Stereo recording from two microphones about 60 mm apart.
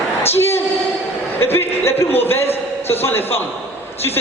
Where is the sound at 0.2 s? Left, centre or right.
Left.